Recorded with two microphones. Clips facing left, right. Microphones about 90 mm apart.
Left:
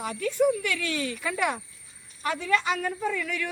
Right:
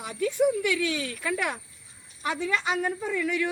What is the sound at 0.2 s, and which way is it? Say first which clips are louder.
A woman's voice: right 1 dB; 10° right (ahead or behind).